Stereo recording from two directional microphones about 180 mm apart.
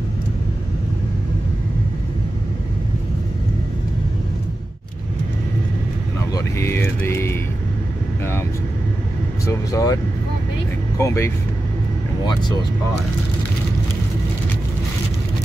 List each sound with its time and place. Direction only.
6.3 s music: 15° left (ahead or behind)
9.5 s speech: 20° left (ahead or behind)
11.0 s speech: 15° left (ahead or behind)